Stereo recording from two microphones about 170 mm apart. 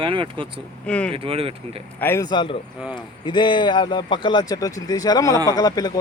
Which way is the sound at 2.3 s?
30° left (ahead or behind).